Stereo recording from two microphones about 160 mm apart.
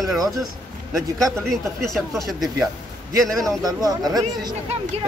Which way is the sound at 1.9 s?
Centre (ahead or behind).